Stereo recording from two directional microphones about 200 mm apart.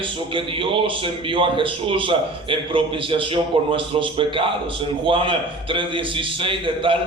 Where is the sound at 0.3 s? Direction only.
25° right (ahead or behind).